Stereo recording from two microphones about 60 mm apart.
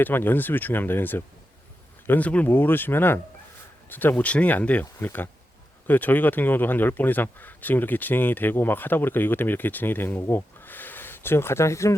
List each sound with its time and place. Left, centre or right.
0.0 s speech: left
2.0 s speech: left
2.5 s speech: left